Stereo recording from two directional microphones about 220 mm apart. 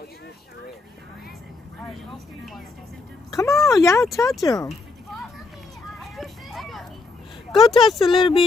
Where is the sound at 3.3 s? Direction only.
15° left (ahead or behind).